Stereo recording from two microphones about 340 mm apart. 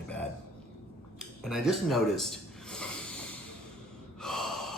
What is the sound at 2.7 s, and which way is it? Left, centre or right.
Snort, centre.